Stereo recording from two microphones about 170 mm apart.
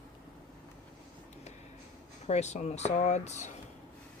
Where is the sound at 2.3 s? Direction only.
40° left (ahead or behind).